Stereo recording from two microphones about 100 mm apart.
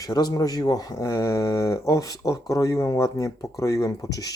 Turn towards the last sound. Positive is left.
turn(degrees=35)  # may be behind; listen again after turning